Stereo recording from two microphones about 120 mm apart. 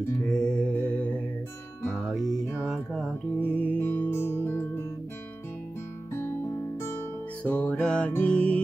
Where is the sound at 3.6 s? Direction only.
15° left (ahead or behind).